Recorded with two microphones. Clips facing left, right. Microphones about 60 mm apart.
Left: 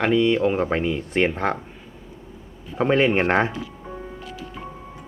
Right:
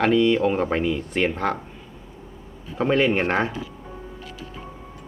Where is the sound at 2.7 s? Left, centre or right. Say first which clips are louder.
Left 1 dB; centre.